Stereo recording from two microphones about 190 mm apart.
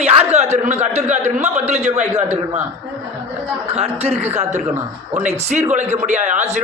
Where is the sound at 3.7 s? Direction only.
30° right (ahead or behind).